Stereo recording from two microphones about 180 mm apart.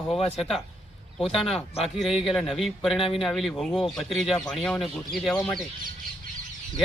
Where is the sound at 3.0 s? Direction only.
30° left (ahead or behind).